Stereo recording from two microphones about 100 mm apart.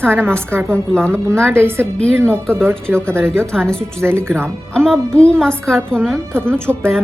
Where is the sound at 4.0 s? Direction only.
25° right (ahead or behind).